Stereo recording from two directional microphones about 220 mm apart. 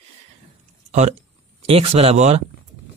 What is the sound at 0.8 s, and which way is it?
Speech, 30° right (ahead or behind).